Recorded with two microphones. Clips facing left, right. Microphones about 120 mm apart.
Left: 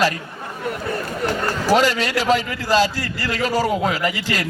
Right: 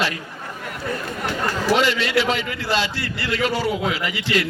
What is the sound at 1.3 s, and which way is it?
A man's voice, 40° left (ahead or behind).